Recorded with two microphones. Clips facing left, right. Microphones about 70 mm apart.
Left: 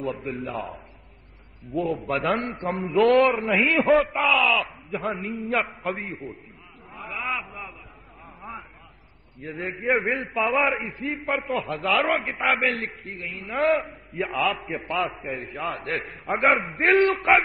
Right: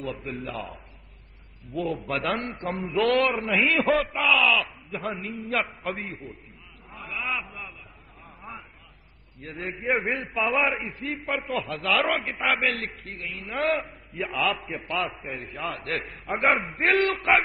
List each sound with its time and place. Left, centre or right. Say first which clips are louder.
0.0 s a man's voice: left 3 dB; centre
5.9 s a man's voice: left 2 dB; left
6.9 s a sound: left 2 dB; centre
7.4 s a sound: left 2 dB; centre
8.4 s a sound: left 3 dB; centre
9.4 s a man's voice: left 3 dB; centre
11.6 s a man's voice: left 3 dB; centre
11.9 s a man's voice: left 1 dB; centre
12.6 s a man's voice: left 2 dB; centre
13.2 s a man's voice: left 1 dB; left
13.6 s a man's voice: left 4 dB; centre
17.0 s a man's voice: left 4 dB; centre